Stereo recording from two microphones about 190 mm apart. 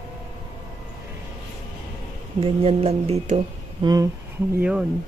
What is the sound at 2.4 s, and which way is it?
Speech, 30° right (ahead or behind).